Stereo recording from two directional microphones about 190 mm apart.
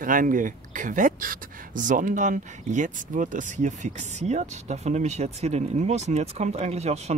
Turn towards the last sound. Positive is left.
turn(degrees=-35)  # may be behind; listen again after turning